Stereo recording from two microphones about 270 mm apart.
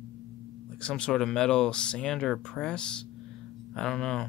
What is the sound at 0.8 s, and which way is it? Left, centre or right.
Speech, centre.